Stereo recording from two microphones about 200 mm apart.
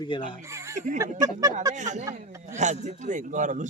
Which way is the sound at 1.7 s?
35° right (ahead or behind).